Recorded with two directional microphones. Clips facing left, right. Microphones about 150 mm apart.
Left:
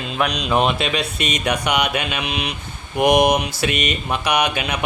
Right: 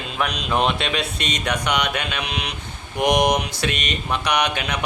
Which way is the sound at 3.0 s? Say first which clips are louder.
Left 3 dB; 5° left (ahead or behind).